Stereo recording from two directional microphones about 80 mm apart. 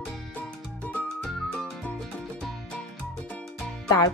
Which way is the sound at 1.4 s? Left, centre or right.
Centre.